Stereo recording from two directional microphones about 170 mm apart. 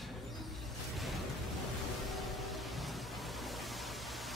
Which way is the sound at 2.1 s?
Centre (ahead or behind).